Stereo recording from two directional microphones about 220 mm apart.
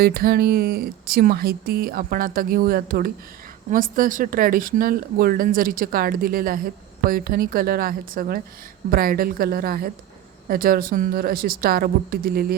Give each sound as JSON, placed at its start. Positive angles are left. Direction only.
{"t": 0.0, "sound": "speech", "side_deg": -45}